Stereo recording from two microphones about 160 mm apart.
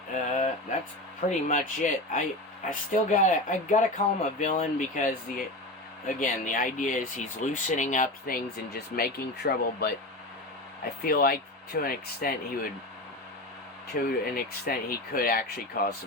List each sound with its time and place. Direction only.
0.1 s a sound: 45° left (ahead or behind)
1.3 s speech: 50° left (ahead or behind); by 9.9 s 85° left
11.0 s speech: 65° left (ahead or behind)
13.9 s speech: 70° left (ahead or behind)